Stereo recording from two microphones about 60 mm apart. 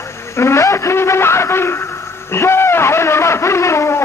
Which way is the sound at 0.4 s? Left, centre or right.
Left.